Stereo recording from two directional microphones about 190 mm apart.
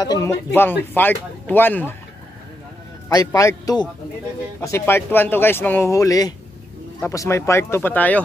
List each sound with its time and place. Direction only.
0.0 s speech: 20° left (ahead or behind)
3.3 s speech: 15° left (ahead or behind)